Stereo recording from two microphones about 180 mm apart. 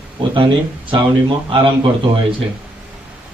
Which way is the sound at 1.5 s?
30° right (ahead or behind).